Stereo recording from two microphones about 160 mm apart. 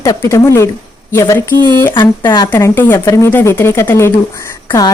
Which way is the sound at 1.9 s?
30° left (ahead or behind).